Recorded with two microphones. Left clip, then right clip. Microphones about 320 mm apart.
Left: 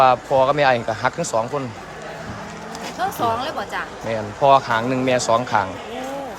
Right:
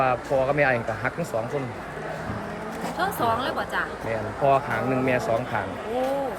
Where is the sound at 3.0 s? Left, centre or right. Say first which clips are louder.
Left 3 dB; centre.